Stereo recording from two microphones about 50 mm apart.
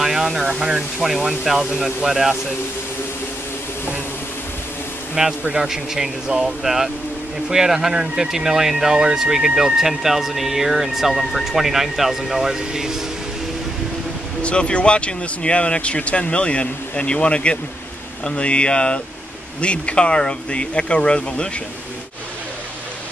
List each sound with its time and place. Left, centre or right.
0.0 s speech: centre
5.4 s speech: centre
14.4 s speech: left